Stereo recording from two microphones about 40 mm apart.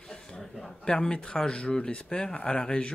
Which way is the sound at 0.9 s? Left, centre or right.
Centre.